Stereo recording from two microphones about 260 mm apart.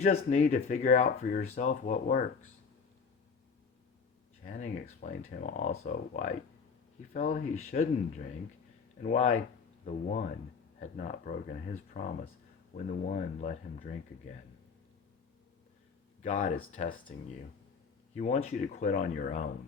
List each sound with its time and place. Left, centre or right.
0.0 s speech: left
4.4 s speech: left
16.2 s speech: left
18.2 s speech: left